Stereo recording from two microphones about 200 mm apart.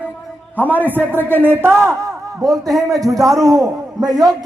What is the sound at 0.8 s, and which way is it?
Speech, 10° right (ahead or behind).